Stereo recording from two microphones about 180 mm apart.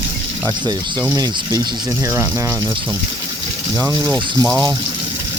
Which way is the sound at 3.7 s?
15° right (ahead or behind).